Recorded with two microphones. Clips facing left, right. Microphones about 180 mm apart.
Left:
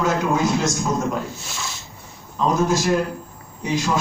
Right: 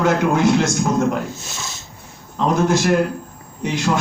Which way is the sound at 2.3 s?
65° right (ahead or behind).